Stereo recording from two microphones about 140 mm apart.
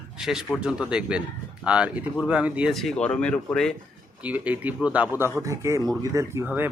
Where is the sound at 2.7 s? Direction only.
Centre (ahead or behind).